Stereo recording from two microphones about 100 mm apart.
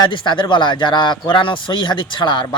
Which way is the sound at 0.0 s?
55° left (ahead or behind).